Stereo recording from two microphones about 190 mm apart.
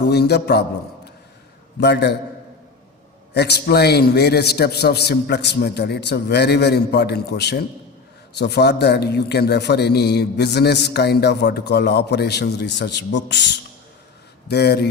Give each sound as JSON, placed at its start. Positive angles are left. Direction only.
{"t": 0.0, "sound": "a man's voice", "side_deg": 60}
{"t": 1.8, "sound": "a man's voice", "side_deg": 60}
{"t": 3.3, "sound": "a man's voice", "side_deg": 60}